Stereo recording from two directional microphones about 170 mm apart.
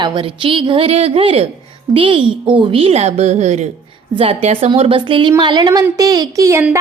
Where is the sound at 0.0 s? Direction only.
30° right (ahead or behind).